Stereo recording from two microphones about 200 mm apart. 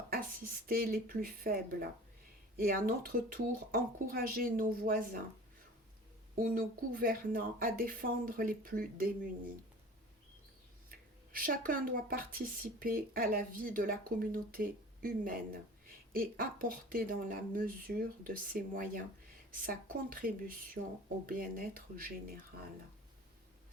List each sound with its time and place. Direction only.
0.1 s speech: 45° right (ahead or behind)
6.3 s speech: 45° right (ahead or behind)
10.9 s speech: 45° right (ahead or behind)